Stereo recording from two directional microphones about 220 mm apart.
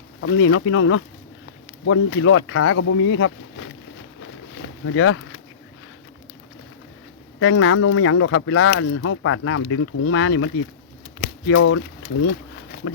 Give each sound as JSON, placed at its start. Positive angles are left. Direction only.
{"t": 0.2, "sound": "speech", "side_deg": 65}
{"t": 4.2, "sound": "a sound", "side_deg": 65}
{"t": 7.3, "sound": "speech", "side_deg": 70}
{"t": 12.8, "sound": "speech", "side_deg": 90}